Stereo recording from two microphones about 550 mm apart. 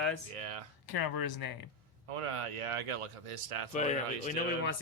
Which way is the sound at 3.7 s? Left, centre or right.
Centre.